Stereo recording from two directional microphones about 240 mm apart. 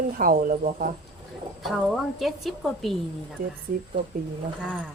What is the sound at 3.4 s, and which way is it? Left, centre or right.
Speech, right.